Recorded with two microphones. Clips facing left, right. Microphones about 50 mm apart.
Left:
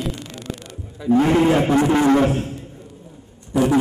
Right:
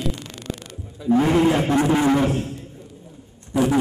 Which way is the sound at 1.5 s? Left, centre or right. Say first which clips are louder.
Left 2 dB; centre.